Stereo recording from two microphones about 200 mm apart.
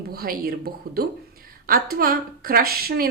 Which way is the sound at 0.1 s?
50° right (ahead or behind).